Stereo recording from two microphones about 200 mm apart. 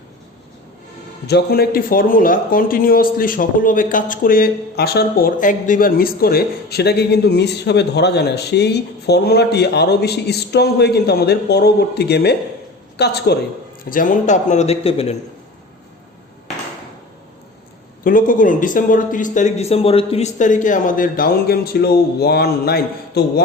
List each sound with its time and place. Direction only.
1.3 s a man's voice: 55° left (ahead or behind)
13.9 s speech: 40° left (ahead or behind)
18.0 s speech: 45° left (ahead or behind)